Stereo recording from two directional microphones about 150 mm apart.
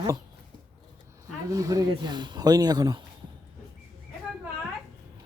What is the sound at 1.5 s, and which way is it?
Speech, 20° right (ahead or behind).